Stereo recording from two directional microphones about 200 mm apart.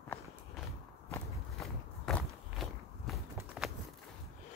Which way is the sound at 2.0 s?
Centre (ahead or behind).